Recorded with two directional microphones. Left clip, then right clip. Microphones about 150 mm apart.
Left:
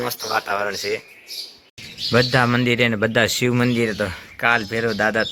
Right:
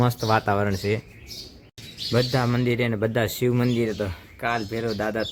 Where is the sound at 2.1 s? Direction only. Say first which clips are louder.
Left 7 dB; 5° left (ahead or behind).